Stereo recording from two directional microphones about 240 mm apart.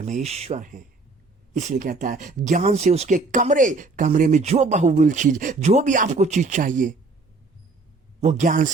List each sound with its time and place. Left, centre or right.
0.0 s speech: right
8.2 s speech: right